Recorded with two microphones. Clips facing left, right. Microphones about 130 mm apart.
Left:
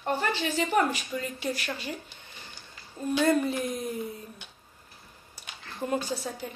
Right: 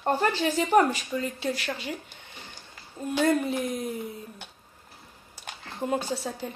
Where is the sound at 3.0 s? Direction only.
20° right (ahead or behind).